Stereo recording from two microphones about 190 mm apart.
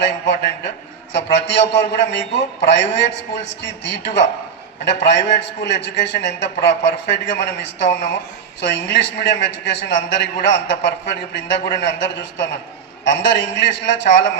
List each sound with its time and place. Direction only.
0.0 s a man's voice: 65° left (ahead or behind)